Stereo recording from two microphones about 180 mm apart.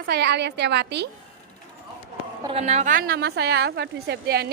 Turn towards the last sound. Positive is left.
turn(degrees=-65)  # may be behind; listen again after turning